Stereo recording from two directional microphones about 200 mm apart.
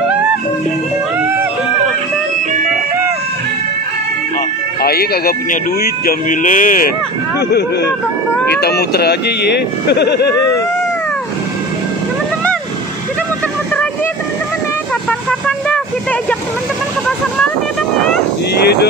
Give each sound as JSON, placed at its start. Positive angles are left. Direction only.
{"t": 4.8, "sound": "speech", "side_deg": 50}
{"t": 7.3, "sound": "speech", "side_deg": 55}
{"t": 15.0, "sound": "vehicle", "side_deg": 5}